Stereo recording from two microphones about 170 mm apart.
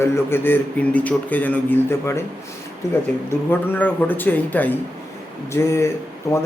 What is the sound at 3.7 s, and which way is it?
Speech, 10° left (ahead or behind).